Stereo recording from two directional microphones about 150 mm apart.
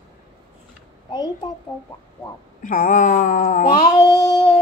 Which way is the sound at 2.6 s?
60° left (ahead or behind).